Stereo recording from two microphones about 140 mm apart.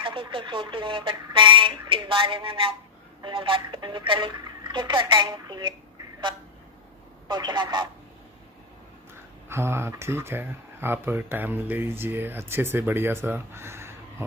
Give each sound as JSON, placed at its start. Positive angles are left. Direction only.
{"t": 0.0, "sound": "speech", "side_deg": -40}
{"t": 7.2, "sound": "speech", "side_deg": -30}
{"t": 9.5, "sound": "speech", "side_deg": -20}